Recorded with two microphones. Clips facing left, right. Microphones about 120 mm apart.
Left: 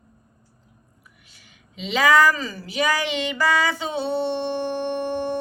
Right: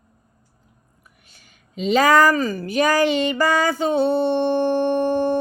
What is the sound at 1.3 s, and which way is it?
Speech, 45° right (ahead or behind).